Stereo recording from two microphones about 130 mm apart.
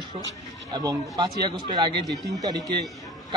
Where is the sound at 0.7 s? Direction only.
30° right (ahead or behind).